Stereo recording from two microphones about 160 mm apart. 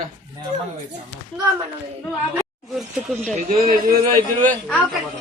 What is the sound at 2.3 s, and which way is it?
Speech, centre (ahead or behind).